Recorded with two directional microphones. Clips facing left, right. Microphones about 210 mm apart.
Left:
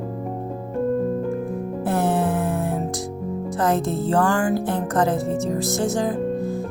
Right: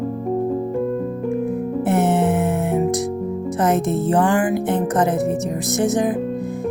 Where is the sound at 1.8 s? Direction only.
20° right (ahead or behind).